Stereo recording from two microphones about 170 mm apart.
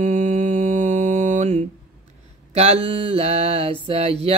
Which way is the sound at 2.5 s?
40° right (ahead or behind).